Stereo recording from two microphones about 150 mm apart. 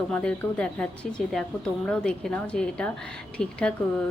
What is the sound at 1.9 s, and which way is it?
A woman's voice, 5° left (ahead or behind).